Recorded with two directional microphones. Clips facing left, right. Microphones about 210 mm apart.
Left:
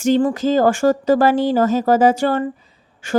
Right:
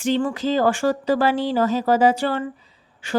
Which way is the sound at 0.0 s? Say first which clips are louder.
Left 5 dB; 40° left (ahead or behind).